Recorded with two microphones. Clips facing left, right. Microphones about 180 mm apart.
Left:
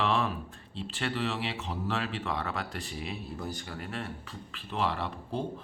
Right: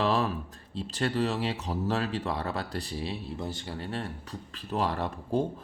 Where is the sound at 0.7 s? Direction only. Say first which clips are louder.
Right 4 dB; 40° right (ahead or behind).